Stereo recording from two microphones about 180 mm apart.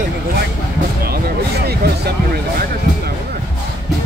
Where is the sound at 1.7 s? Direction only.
60° right (ahead or behind).